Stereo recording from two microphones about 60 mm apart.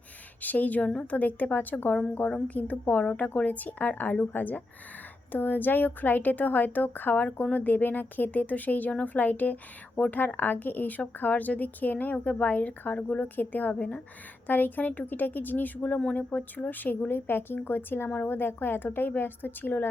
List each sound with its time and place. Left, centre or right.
0.4 s a woman's voice: left